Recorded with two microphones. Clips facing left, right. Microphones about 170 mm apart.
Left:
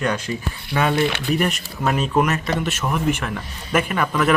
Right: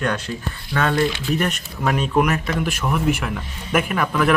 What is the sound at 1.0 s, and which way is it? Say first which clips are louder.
Speech: even; 65° left (ahead or behind).